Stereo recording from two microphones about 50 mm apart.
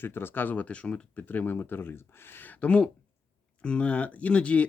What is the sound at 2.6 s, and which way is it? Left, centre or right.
Speech, left.